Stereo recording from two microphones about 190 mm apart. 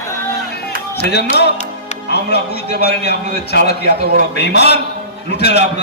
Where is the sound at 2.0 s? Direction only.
60° left (ahead or behind).